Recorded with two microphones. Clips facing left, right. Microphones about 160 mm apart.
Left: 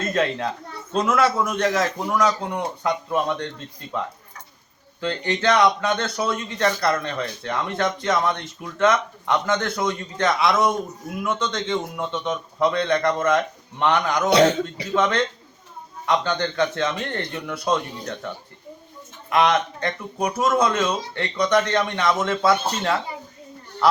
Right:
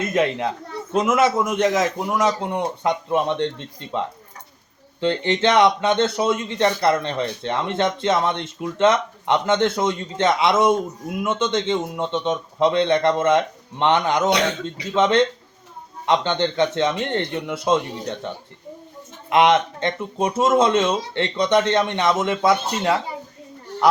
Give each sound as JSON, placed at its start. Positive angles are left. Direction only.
{"t": 0.0, "sound": "a child's voice", "side_deg": -15}
{"t": 19.3, "sound": "a child's voice", "side_deg": -20}